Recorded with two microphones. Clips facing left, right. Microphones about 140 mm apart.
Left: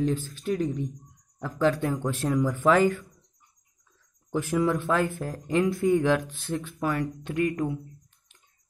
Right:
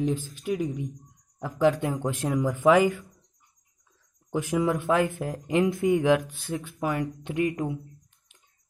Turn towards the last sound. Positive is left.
turn(degrees=-20)  # may be behind; listen again after turning